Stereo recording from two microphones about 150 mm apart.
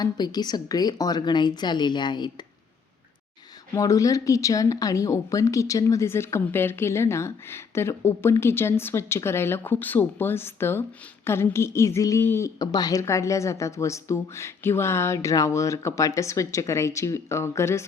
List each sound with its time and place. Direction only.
0.0 s speech: 25° left (ahead or behind)
3.8 s speech: 20° left (ahead or behind)